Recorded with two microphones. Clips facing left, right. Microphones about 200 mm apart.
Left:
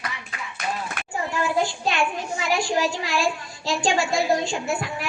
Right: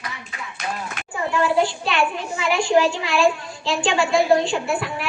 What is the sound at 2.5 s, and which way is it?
A woman's voice, 40° left (ahead or behind).